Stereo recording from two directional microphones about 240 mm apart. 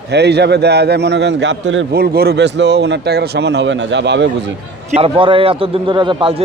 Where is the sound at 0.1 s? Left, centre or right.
Right.